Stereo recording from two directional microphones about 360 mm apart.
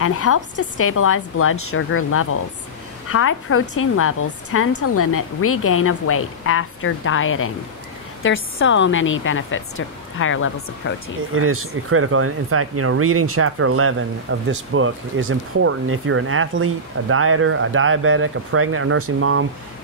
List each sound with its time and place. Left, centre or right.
0.0 s a woman's voice: left
11.3 s speech: right